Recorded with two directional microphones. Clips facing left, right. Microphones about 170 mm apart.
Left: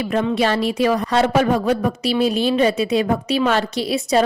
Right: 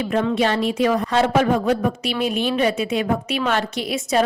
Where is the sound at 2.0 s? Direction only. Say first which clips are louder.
Left 7 dB; 35° left (ahead or behind).